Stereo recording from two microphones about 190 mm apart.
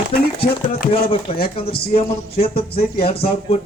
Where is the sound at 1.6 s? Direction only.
55° left (ahead or behind).